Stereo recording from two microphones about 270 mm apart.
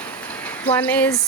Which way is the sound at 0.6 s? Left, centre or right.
Centre.